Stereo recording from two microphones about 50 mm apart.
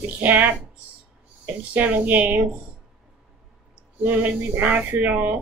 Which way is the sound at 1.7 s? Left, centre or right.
Right.